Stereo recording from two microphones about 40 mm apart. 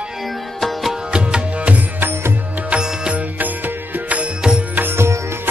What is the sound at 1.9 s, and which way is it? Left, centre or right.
Music, right.